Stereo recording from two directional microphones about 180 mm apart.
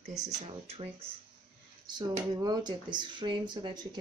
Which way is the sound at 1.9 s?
20° right (ahead or behind).